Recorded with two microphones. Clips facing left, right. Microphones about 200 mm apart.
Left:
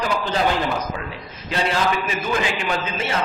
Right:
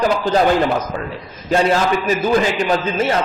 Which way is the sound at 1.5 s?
40° right (ahead or behind).